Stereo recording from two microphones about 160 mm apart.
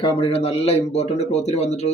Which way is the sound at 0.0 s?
35° left (ahead or behind).